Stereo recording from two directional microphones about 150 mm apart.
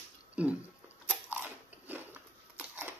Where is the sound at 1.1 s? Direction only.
10° right (ahead or behind).